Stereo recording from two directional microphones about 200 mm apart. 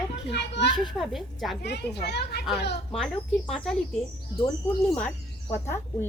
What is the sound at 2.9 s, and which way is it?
A woman's voice, 5° left (ahead or behind).